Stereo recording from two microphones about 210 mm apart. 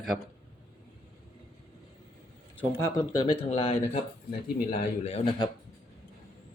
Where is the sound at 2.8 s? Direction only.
10° left (ahead or behind).